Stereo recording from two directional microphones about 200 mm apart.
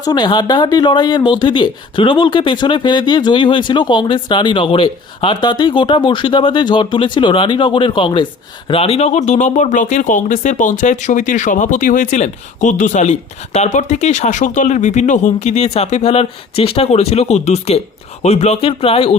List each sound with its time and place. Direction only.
0.0 s speech: 20° left (ahead or behind)